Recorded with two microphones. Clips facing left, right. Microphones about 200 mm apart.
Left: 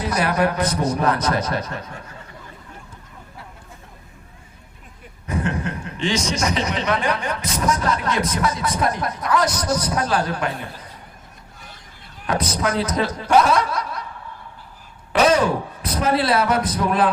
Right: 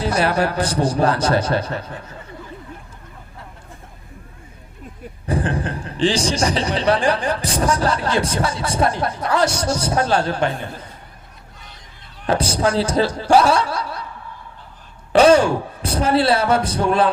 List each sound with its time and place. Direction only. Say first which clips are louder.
0.0 s a man's voice: right 1 dB; 30° right (ahead or behind)
5.2 s a man's voice: right 2 dB; 30° right (ahead or behind)
12.2 s a man's voice: right 4 dB; 30° right (ahead or behind)
15.1 s speech: right 5 dB; 30° right (ahead or behind)